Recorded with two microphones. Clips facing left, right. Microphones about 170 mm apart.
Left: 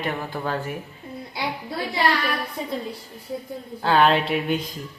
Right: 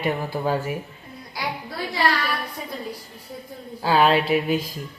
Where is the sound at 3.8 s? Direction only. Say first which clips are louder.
Even; 5° right (ahead or behind).